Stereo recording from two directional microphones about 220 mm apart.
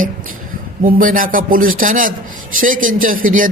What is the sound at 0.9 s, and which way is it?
Speech, 40° right (ahead or behind).